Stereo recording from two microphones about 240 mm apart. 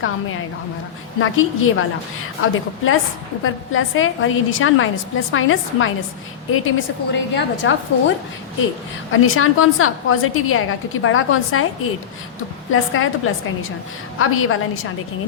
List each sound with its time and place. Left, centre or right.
0.0 s a woman's voice: left
9.1 s a woman's voice: left
12.7 s a woman's voice: left